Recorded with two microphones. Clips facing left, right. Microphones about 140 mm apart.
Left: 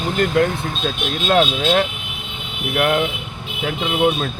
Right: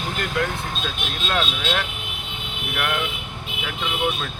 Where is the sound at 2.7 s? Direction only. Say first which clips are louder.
Left 8 dB; 30° left (ahead or behind).